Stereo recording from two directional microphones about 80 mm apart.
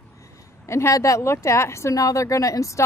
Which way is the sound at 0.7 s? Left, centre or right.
Left.